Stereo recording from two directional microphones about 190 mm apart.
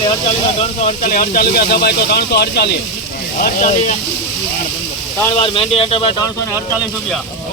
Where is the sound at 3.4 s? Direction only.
45° left (ahead or behind).